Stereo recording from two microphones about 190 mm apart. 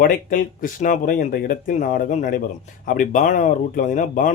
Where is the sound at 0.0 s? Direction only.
50° left (ahead or behind).